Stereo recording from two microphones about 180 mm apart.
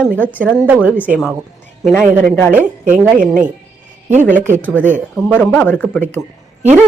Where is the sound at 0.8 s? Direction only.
10° left (ahead or behind).